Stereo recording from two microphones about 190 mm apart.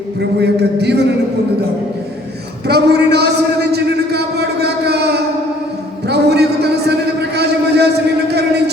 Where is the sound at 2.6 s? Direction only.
60° right (ahead or behind).